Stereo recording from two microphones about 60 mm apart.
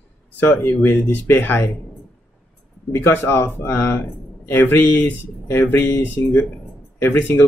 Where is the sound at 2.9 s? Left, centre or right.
Left.